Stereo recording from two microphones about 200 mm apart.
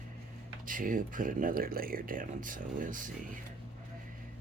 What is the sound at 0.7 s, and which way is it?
Speech, 45° right (ahead or behind).